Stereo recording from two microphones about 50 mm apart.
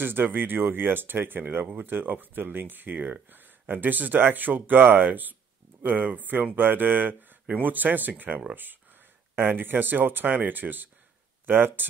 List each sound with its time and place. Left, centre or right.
0.0 s speech: right